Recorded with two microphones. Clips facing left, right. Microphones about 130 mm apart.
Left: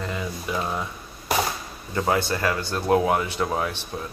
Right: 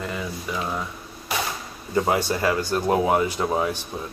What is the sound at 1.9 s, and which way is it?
Speech, 15° right (ahead or behind).